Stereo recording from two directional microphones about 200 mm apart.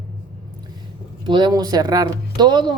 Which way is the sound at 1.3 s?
20° right (ahead or behind).